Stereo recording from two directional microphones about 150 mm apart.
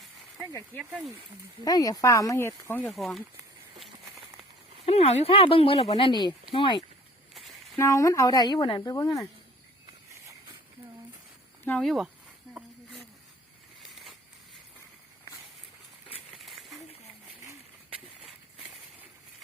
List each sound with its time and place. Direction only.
0.8 s speech: centre (ahead or behind)
1.6 s a woman's voice: 25° left (ahead or behind)
2.9 s speech: centre (ahead or behind)
4.9 s speech: 45° left (ahead or behind)
7.8 s a woman's voice: 20° left (ahead or behind)
11.6 s speech: 5° left (ahead or behind)
16.5 s a sound: centre (ahead or behind)